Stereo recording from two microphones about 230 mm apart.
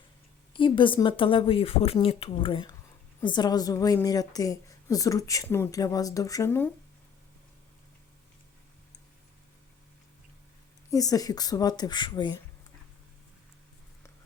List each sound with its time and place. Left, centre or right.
0.5 s a woman's voice: left
10.9 s a woman's voice: centre